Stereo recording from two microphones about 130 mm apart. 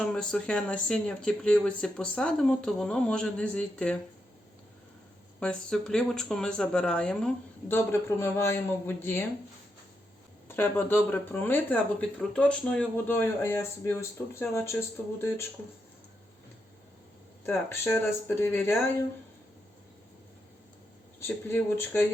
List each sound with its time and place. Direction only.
0.0 s speech: 5° left (ahead or behind)
5.4 s speech: 5° left (ahead or behind)
7.7 s speech: 15° left (ahead or behind)
10.5 s speech: 15° left (ahead or behind)
17.4 s speech: 20° left (ahead or behind)
21.2 s speech: 20° left (ahead or behind)